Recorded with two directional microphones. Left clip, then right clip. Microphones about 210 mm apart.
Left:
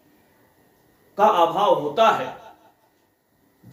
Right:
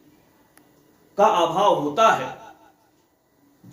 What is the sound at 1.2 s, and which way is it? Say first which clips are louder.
Speech: even; centre (ahead or behind).